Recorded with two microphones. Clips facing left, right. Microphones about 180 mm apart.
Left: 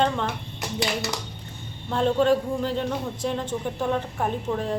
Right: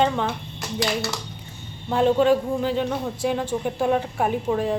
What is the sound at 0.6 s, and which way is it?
Speech, 20° left (ahead or behind).